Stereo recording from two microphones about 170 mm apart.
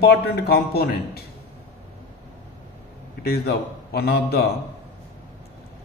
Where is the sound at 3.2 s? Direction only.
70° left (ahead or behind).